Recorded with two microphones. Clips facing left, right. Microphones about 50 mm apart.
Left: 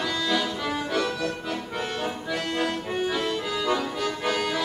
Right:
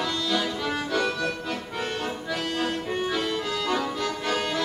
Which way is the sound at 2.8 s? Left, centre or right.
Centre.